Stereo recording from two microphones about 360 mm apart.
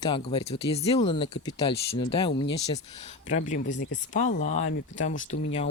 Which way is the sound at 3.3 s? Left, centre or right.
Left.